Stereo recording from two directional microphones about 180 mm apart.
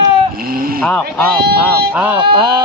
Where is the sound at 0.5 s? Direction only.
55° right (ahead or behind).